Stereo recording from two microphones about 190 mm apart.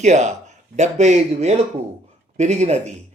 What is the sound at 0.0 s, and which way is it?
A man's voice, 40° right (ahead or behind).